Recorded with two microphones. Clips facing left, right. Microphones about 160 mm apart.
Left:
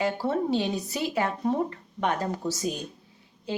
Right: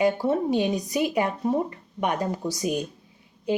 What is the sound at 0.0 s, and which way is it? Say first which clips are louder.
A woman's voice: right 4 dB; 15° right (ahead or behind).